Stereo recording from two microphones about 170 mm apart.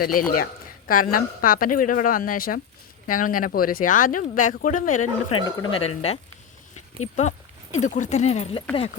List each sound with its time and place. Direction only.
0.0 s speech: 60° left (ahead or behind)
5.3 s speech: 30° left (ahead or behind)
5.8 s speech: 40° left (ahead or behind)
7.2 s speech: 45° left (ahead or behind)